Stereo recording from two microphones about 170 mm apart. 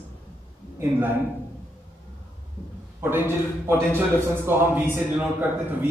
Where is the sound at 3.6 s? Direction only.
15° right (ahead or behind).